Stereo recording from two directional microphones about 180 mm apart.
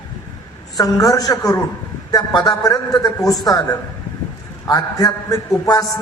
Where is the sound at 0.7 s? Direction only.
20° left (ahead or behind).